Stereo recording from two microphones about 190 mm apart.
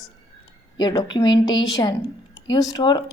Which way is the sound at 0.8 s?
20° left (ahead or behind).